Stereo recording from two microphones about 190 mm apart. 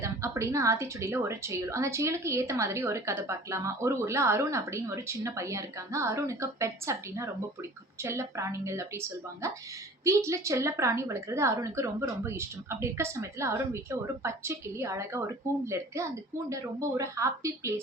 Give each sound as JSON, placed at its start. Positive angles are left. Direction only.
{"t": 0.0, "sound": "a woman's voice", "side_deg": -15}